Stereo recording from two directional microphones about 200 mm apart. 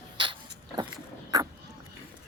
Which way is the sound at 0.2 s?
25° right (ahead or behind).